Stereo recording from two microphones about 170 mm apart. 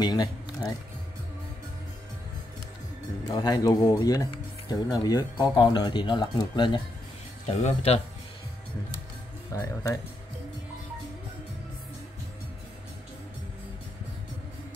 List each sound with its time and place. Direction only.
0.0 s speech: 25° left (ahead or behind)
3.3 s speech: 25° left (ahead or behind)
7.4 s speech: 40° left (ahead or behind)
9.5 s speech: 20° left (ahead or behind)